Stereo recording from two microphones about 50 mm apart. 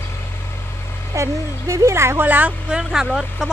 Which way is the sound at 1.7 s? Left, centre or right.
Right.